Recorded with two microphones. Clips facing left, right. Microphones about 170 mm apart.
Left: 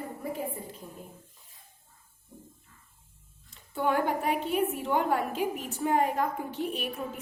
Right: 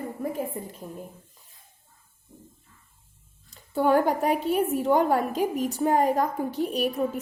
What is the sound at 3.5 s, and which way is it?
A woman's voice, 40° right (ahead or behind).